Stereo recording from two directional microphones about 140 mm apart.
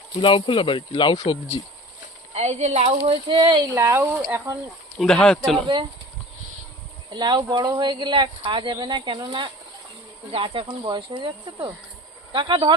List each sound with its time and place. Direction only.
0.2 s speech: 35° left (ahead or behind)
2.3 s speech: 50° right (ahead or behind); by 4.2 s 20° right (ahead or behind)
4.9 s speech: centre (ahead or behind)
7.1 s speech: 35° right (ahead or behind)